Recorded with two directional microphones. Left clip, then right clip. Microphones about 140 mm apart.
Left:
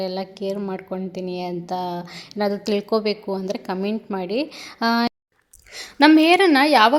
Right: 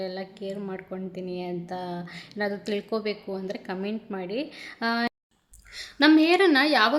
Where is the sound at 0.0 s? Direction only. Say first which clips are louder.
Left 7 dB; 35° left (ahead or behind).